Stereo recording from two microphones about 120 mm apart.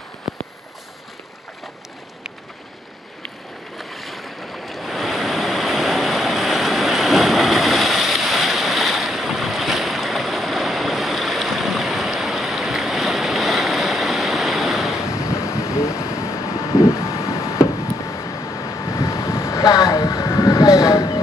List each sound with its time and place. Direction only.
3.7 s waves: centre (ahead or behind)
15.2 s a sound: 25° left (ahead or behind)
15.9 s vehicle: 25° left (ahead or behind)